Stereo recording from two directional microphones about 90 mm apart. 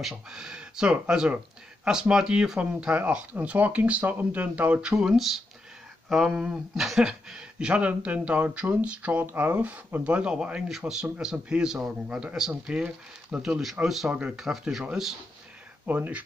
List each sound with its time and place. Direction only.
0.0 s a man's voice: 5° right (ahead or behind)
15.8 s speech: 20° right (ahead or behind)